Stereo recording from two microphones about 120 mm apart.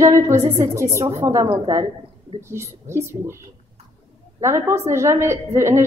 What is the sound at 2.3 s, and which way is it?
A woman's voice, 20° right (ahead or behind).